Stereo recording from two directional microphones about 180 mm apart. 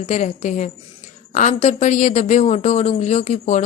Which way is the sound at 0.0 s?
40° left (ahead or behind).